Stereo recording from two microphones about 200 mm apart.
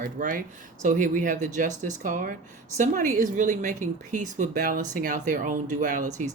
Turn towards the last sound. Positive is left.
turn(degrees=-40)  # may be behind; listen again after turning